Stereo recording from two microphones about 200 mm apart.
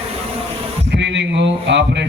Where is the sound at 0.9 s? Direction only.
60° right (ahead or behind).